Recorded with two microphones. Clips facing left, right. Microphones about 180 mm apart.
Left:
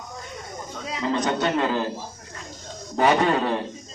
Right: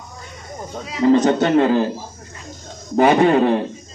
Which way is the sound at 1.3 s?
50° right (ahead or behind).